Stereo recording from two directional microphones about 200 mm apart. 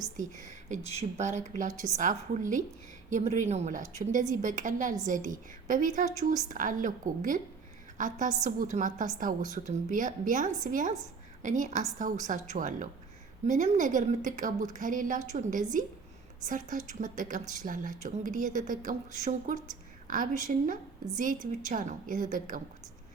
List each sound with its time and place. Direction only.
0.2 s a woman's voice: 40° right (ahead or behind)